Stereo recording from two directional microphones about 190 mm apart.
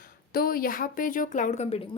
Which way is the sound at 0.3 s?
50° left (ahead or behind).